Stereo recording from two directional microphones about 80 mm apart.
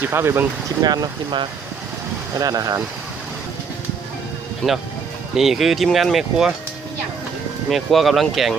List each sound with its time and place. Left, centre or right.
0.0 s speech: right
0.8 s speech: right
2.3 s speech: right
4.6 s speech: centre
5.3 s speech: centre
7.7 s speech: centre